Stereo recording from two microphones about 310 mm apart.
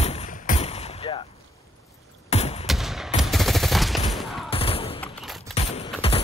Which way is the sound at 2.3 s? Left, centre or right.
Centre.